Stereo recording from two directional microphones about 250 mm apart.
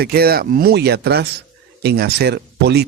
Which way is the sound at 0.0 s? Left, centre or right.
Right.